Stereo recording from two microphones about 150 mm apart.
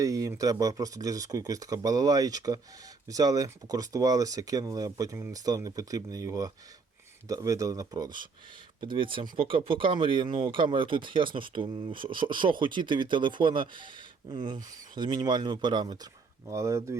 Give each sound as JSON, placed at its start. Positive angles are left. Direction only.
{"t": 0.0, "sound": "speech", "side_deg": -20}